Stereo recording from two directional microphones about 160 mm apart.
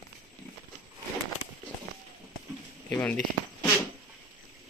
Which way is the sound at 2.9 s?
10° left (ahead or behind).